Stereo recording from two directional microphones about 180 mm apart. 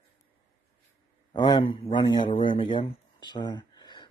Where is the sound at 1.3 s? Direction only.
25° left (ahead or behind).